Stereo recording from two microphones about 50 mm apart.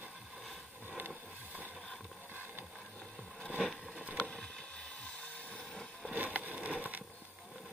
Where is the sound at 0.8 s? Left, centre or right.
Right.